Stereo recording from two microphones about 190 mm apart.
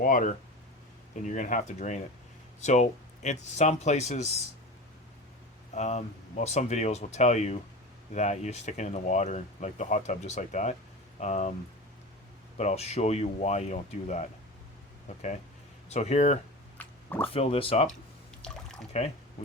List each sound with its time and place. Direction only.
0.0 s speech: 45° left (ahead or behind)
5.7 s speech: 35° left (ahead or behind)
12.5 s speech: 35° left (ahead or behind)
15.9 s speech: 35° left (ahead or behind)
16.7 s a sound: 10° left (ahead or behind)
17.3 s speech: 30° left (ahead or behind)
18.4 s water: 5° left (ahead or behind)